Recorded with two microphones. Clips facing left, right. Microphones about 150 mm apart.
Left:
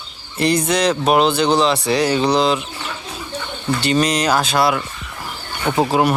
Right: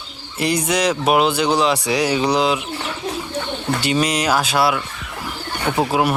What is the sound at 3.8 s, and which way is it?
Speech, 10° right (ahead or behind).